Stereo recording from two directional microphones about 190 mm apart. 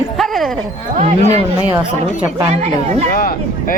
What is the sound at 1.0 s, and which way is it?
Speech, 35° right (ahead or behind).